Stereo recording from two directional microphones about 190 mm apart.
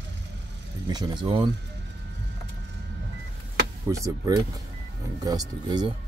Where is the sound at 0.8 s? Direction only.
20° right (ahead or behind).